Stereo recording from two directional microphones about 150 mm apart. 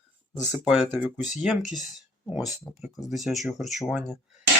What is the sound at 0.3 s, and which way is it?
Speech, 20° left (ahead or behind).